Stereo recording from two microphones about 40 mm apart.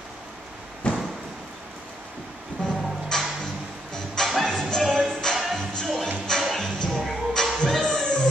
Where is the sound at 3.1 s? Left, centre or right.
Centre.